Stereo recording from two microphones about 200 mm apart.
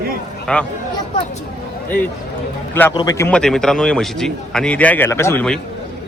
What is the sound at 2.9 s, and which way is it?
A man's voice, 20° left (ahead or behind).